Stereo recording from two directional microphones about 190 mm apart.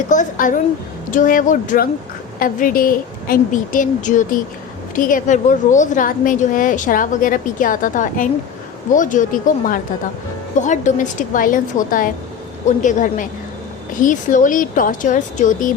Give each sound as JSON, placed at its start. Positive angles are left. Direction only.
{"t": 0.1, "sound": "a woman's voice", "side_deg": 45}